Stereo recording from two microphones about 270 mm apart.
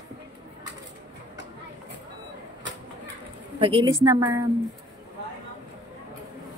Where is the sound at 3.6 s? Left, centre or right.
Centre.